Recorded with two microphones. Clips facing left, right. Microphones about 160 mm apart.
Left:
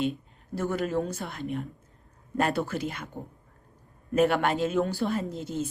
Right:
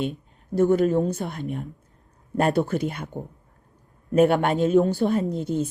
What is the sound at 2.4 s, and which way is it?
Speech, 50° right (ahead or behind).